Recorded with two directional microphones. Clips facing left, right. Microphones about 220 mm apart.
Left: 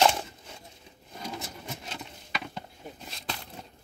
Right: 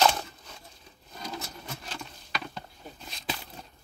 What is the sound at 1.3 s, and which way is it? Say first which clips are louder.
Patter: even; 20° left (ahead or behind).